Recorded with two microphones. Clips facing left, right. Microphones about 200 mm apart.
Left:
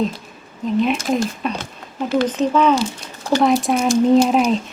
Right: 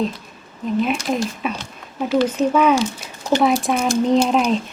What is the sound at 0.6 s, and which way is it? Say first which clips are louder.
Speech: left 2 dB; centre (ahead or behind).